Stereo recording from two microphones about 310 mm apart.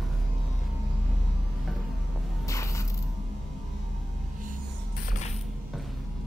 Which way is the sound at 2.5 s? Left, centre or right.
Centre.